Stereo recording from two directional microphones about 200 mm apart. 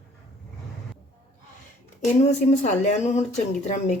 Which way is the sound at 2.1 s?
35° left (ahead or behind).